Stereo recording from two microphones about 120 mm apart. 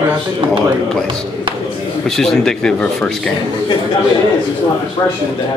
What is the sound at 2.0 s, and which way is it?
Speech, 5° left (ahead or behind).